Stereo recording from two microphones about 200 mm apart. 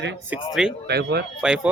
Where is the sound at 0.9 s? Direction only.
55° right (ahead or behind).